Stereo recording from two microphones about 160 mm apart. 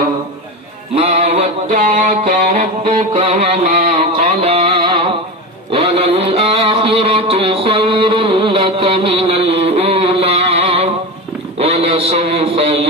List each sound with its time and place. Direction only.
0.9 s mantra: 40° right (ahead or behind)
1.8 s music: 50° right (ahead or behind); by 5.1 s 30° right (ahead or behind)
5.7 s a sound: 35° right (ahead or behind)